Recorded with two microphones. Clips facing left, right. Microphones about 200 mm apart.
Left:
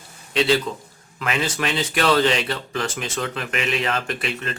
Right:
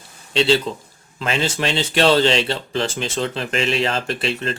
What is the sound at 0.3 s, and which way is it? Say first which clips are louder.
Speech: right 2 dB; 30° right (ahead or behind).